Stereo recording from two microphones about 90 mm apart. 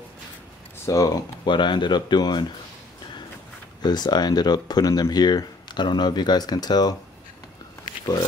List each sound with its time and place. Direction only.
0.8 s speech: 40° left (ahead or behind)
1.4 s speech: 60° left (ahead or behind)
3.8 s speech: 50° left (ahead or behind)